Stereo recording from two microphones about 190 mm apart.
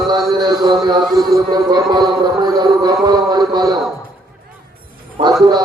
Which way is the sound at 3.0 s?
20° right (ahead or behind).